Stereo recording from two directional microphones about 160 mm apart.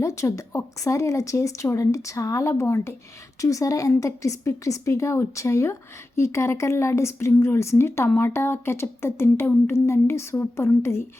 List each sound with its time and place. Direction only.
0.0 s speech: 20° left (ahead or behind)